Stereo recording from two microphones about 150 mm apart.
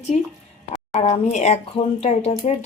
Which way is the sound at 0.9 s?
45° left (ahead or behind).